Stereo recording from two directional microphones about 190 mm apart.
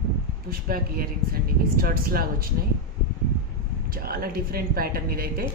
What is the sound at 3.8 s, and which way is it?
Speech, 50° right (ahead or behind).